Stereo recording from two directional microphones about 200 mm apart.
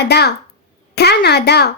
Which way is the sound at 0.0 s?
55° left (ahead or behind).